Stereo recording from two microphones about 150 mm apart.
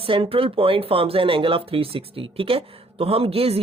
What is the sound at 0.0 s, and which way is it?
Speech, 35° right (ahead or behind).